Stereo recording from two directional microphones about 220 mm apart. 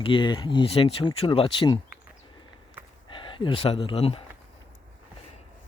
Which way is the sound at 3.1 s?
25° left (ahead or behind).